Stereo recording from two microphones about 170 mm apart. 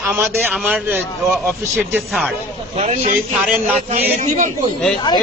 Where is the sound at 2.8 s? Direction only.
40° right (ahead or behind).